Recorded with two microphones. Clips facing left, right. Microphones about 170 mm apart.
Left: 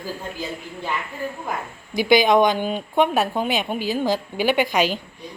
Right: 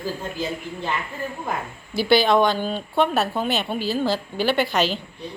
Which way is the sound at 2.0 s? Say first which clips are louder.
Left 1 dB; 15° left (ahead or behind).